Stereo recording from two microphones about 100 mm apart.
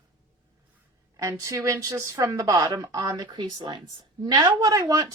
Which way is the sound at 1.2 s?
30° right (ahead or behind).